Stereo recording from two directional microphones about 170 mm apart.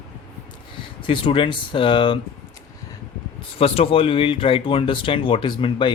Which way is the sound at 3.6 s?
35° left (ahead or behind).